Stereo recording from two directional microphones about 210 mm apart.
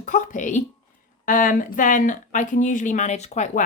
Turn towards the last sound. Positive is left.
turn(degrees=35)  # may be behind; listen again after turning